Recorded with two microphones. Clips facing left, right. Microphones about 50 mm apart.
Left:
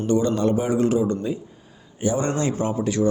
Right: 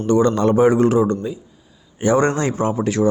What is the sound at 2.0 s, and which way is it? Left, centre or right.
Speech, right.